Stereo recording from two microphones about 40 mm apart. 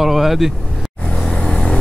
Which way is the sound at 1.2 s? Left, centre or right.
Left.